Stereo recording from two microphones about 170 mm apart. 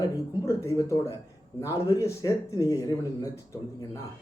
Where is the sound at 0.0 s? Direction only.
20° left (ahead or behind).